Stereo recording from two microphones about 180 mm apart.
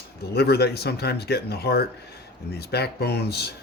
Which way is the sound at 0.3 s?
65° left (ahead or behind).